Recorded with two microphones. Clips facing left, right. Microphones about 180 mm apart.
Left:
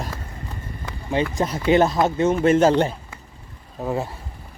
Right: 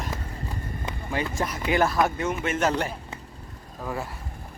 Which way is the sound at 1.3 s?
25° left (ahead or behind).